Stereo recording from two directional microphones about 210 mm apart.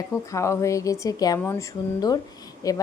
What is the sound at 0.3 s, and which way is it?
Speech, 15° left (ahead or behind).